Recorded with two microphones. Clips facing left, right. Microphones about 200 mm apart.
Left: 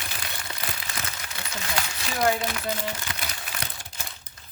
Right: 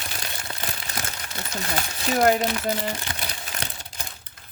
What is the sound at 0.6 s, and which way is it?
Crumpling, 40° right (ahead or behind).